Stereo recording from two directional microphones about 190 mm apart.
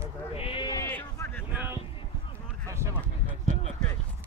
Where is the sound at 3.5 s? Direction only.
40° right (ahead or behind).